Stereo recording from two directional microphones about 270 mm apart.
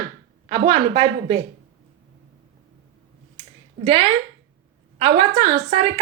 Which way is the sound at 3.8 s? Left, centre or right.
Centre.